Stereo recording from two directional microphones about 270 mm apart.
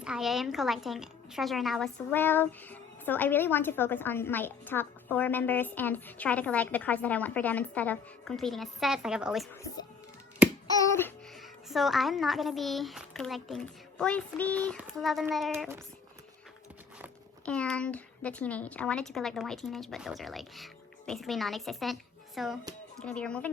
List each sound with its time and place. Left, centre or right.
0.0 s a woman's voice: centre
10.4 s a sound: centre
10.8 s music: centre
11.7 s a woman's voice: centre
17.4 s a woman's voice: centre